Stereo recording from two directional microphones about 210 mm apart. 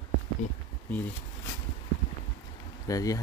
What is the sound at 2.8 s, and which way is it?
Speech, 15° left (ahead or behind).